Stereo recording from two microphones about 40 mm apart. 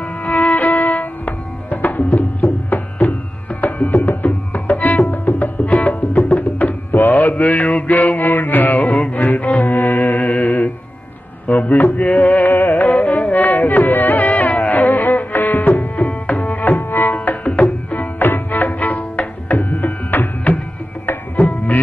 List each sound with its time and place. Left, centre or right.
0.2 s music: left
6.6 s mantra: left
9.1 s music: left
10.4 s music: left
12.4 s music: left